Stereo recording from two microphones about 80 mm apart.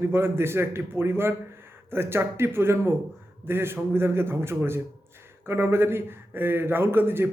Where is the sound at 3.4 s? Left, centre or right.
Right.